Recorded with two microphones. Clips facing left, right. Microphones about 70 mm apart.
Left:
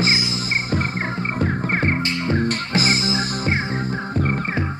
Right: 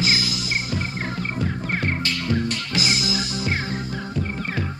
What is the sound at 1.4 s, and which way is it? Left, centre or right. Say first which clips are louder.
Music: left 5 dB; left.